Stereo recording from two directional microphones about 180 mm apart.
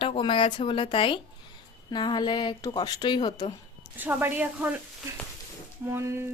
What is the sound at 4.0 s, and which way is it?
Speech, 10° right (ahead or behind).